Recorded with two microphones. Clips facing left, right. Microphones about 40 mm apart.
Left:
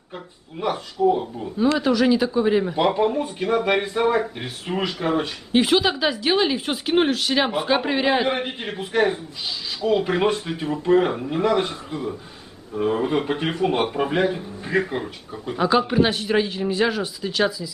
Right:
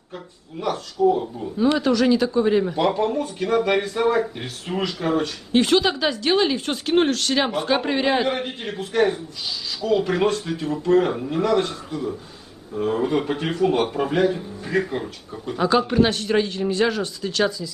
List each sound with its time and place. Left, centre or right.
0.1 s speech: centre
8.3 s speech: centre